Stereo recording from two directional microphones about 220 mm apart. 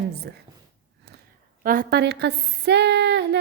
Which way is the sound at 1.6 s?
45° right (ahead or behind).